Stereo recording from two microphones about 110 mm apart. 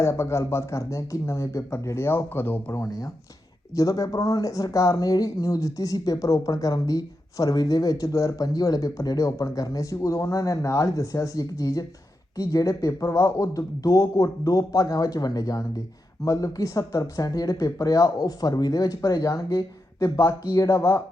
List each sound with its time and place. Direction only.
0.0 s speech: 25° left (ahead or behind)